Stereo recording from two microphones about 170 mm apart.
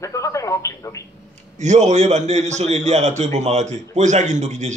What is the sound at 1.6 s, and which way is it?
A man's voice, 45° right (ahead or behind).